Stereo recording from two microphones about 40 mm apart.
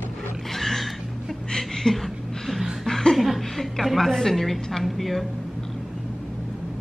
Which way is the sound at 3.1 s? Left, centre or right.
Centre.